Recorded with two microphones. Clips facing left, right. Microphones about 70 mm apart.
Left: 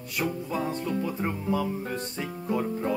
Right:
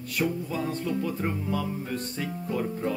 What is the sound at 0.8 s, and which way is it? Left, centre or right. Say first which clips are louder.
Speech: even; centre.